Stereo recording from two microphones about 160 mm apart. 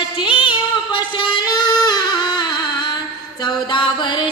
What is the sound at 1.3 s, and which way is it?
Music, 25° left (ahead or behind).